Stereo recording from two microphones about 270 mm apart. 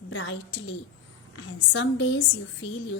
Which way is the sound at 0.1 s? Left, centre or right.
Left.